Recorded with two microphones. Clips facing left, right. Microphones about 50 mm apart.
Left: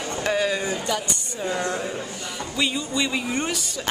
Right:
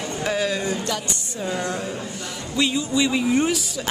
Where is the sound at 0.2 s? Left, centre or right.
Centre.